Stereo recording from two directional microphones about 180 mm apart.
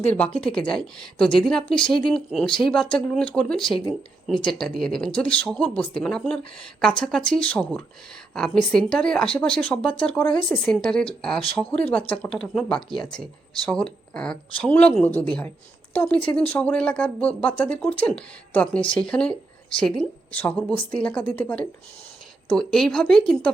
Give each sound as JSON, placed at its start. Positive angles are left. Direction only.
{"t": 0.3, "sound": "speech", "side_deg": 5}
{"t": 3.7, "sound": "speech", "side_deg": 25}
{"t": 4.4, "sound": "speech", "side_deg": 0}